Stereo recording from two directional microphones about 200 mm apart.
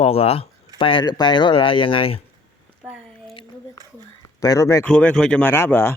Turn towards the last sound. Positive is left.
turn(degrees=10)  # may be behind; listen again after turning